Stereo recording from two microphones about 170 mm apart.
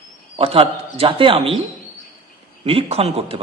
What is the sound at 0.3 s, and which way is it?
A man's voice, 35° right (ahead or behind).